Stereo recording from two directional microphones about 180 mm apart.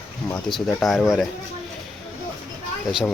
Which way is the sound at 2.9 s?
Centre (ahead or behind).